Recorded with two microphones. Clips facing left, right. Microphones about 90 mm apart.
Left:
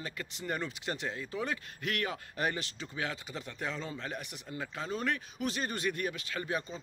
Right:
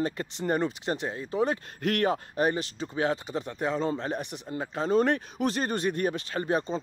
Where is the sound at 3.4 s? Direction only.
25° right (ahead or behind); by 6.8 s 40° right (ahead or behind).